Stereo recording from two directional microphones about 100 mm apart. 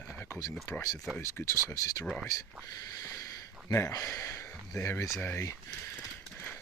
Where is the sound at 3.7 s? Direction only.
35° left (ahead or behind).